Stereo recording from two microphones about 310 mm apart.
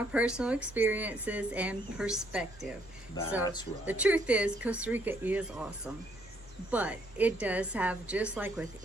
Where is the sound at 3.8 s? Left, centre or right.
Centre.